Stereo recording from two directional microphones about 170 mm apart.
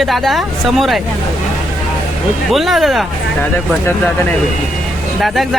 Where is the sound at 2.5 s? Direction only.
Centre (ahead or behind).